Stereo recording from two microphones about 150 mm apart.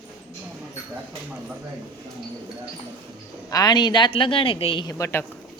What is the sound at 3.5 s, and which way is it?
A woman's voice, 25° left (ahead or behind).